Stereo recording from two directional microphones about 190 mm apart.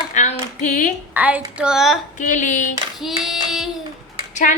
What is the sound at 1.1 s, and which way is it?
Speech, 10° right (ahead or behind).